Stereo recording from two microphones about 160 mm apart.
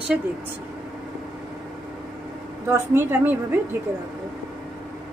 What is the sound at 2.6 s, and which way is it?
Speech, 15° right (ahead or behind).